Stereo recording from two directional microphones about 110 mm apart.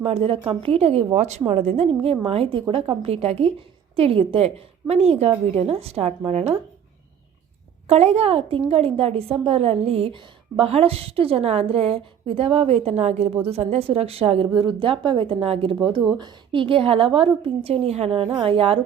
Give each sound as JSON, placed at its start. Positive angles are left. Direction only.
{"t": 0.0, "sound": "a woman's voice", "side_deg": -65}
{"t": 2.0, "sound": "a woman's voice", "side_deg": -60}
{"t": 7.9, "sound": "a woman's voice", "side_deg": -75}
{"t": 14.5, "sound": "a woman's voice", "side_deg": -45}
{"t": 16.1, "sound": "a woman's voice", "side_deg": -45}